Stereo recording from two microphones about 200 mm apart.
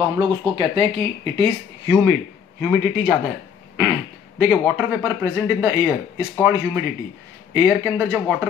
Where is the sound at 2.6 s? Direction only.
5° right (ahead or behind).